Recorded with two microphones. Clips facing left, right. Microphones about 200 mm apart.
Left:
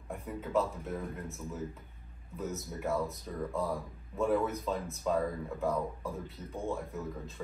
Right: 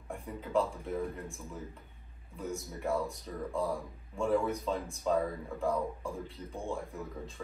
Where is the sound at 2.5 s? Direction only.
Centre (ahead or behind).